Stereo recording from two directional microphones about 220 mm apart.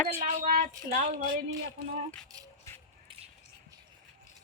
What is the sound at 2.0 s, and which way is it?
Speech, 15° right (ahead or behind).